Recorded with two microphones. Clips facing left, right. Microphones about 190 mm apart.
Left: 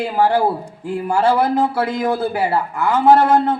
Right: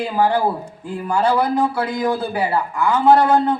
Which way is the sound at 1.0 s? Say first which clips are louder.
Left 2 dB; 25° left (ahead or behind).